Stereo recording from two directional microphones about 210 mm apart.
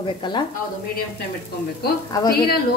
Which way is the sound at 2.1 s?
15° left (ahead or behind).